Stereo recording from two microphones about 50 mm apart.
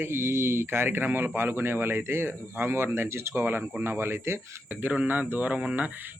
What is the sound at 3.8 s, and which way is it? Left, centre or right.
Speech, right.